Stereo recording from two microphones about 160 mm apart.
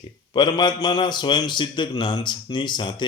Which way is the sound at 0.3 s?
25° left (ahead or behind).